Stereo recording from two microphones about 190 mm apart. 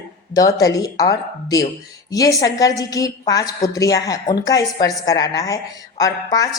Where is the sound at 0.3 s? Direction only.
20° left (ahead or behind).